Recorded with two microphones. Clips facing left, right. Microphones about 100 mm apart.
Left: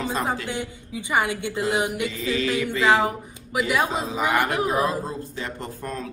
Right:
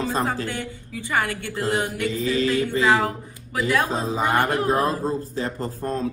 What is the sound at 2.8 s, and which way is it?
Speech, 20° left (ahead or behind).